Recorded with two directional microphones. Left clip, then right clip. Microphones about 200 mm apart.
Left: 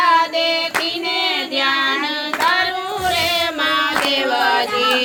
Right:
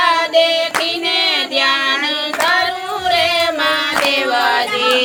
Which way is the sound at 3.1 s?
5° right (ahead or behind).